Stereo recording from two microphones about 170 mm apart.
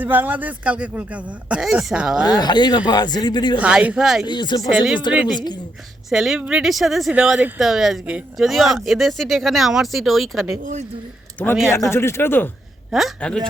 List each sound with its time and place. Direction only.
0.0 s a man's voice: 10° right (ahead or behind)
2.2 s a man's voice: 25° left (ahead or behind)
3.6 s speech: 5° right (ahead or behind)
4.3 s a man's voice: 25° left (ahead or behind)
4.7 s speech: 5° right (ahead or behind)
6.1 s speech: centre (ahead or behind)
10.6 s speech: 45° right (ahead or behind)
11.7 s speech: 15° left (ahead or behind)
12.9 s speech: centre (ahead or behind)